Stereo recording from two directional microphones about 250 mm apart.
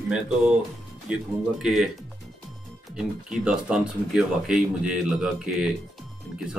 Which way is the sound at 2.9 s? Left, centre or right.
Centre.